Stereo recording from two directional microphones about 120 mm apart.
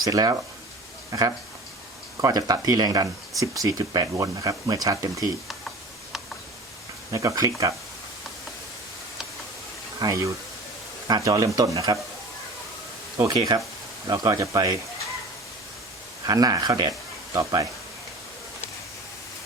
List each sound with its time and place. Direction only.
0.0 s speech: 30° right (ahead or behind)
7.1 s speech: 25° right (ahead or behind)
10.0 s speech: 30° right (ahead or behind)
11.3 s speech: 30° right (ahead or behind)
13.1 s speech: 30° right (ahead or behind)
16.2 s speech: 30° right (ahead or behind)